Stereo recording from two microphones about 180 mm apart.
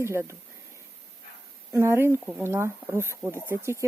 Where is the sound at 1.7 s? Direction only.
15° right (ahead or behind).